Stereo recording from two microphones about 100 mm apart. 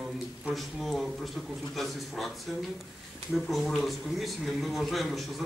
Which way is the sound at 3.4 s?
Centre (ahead or behind).